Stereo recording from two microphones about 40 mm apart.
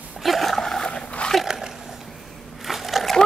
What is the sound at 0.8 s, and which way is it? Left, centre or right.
Dog, left.